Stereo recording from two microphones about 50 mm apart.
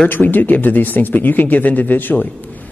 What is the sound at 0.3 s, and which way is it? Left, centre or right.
Speech, left.